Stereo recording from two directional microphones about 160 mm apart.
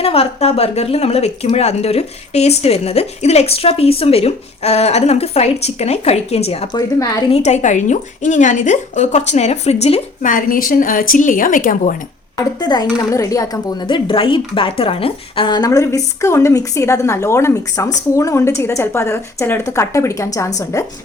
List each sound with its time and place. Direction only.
0.0 s a woman's voice: 40° left (ahead or behind)
10.2 s a woman's voice: 60° left (ahead or behind)
12.5 s speech: 25° left (ahead or behind)